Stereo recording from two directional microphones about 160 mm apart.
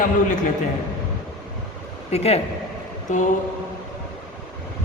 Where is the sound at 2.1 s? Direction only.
40° left (ahead or behind).